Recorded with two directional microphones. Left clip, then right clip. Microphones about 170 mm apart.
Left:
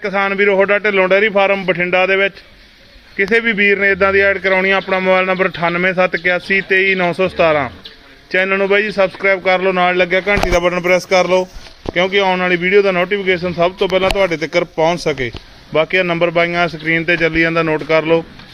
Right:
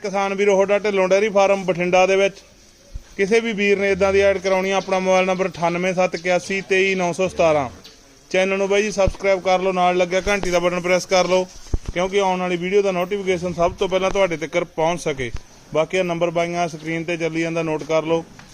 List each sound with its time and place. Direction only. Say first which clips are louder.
0.0 s a man's voice: left 5 dB; 10° right (ahead or behind)